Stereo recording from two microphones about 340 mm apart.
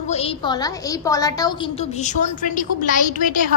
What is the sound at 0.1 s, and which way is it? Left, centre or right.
A woman's voice, centre.